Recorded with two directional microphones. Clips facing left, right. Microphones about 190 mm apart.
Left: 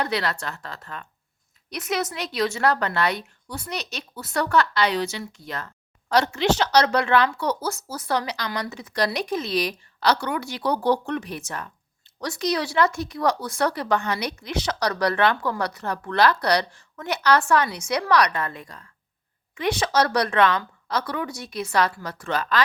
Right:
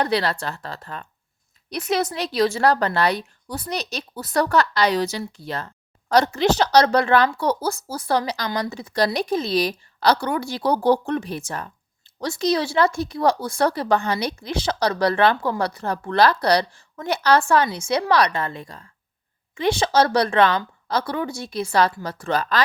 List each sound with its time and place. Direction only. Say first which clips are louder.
0.0 s speech: right 4 dB; 30° right (ahead or behind)